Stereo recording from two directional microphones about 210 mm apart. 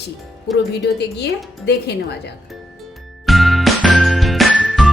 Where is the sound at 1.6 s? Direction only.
55° left (ahead or behind).